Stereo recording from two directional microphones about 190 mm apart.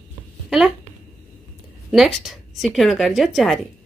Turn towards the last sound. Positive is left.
turn(degrees=0)  # may be behind; listen again after turning